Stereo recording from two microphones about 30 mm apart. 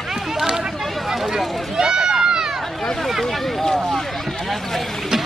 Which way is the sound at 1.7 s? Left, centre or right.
Centre.